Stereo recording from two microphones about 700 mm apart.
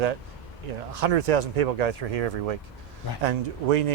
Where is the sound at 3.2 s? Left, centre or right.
Right.